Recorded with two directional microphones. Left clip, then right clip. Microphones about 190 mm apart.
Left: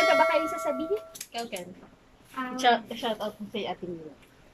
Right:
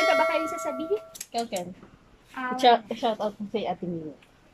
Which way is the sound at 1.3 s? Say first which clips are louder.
Right 6 dB; 20° right (ahead or behind).